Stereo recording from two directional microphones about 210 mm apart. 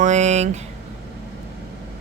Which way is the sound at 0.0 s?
35° right (ahead or behind).